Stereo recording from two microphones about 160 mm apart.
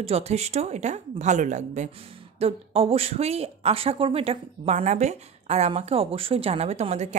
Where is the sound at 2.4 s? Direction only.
35° right (ahead or behind).